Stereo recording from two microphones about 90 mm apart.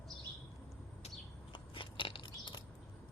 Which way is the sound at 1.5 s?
70° left (ahead or behind).